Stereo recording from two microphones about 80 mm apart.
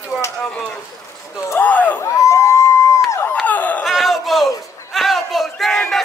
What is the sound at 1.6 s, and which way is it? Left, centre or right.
Chop, centre.